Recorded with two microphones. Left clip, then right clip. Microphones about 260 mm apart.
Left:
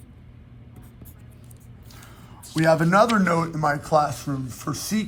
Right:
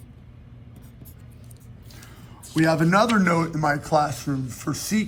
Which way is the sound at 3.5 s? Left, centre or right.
Centre.